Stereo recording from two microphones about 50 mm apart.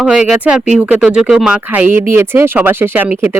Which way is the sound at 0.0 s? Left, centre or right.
Centre.